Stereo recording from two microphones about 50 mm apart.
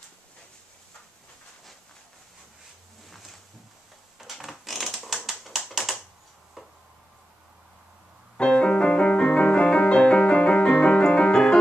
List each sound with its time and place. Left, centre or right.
3.1 s a sound: centre
5.4 s typewriter: centre
8.4 s piano: left